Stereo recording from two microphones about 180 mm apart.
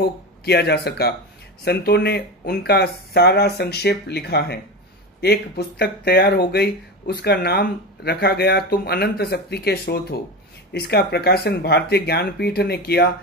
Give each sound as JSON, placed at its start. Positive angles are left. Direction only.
{"t": 0.5, "sound": "speech", "side_deg": 65}